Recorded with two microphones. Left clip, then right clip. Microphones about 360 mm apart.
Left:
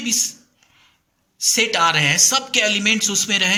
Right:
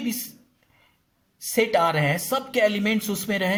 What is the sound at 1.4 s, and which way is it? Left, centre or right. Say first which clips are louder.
Speech: left 4 dB; centre.